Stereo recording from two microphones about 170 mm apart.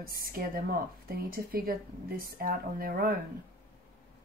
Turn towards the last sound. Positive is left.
turn(degrees=-60)  # may be behind; listen again after turning